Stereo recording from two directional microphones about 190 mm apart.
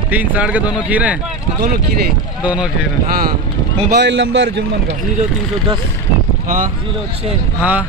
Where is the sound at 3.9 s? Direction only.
70° right (ahead or behind).